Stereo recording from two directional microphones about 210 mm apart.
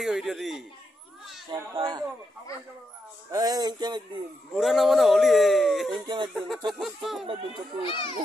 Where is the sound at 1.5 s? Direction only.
20° right (ahead or behind).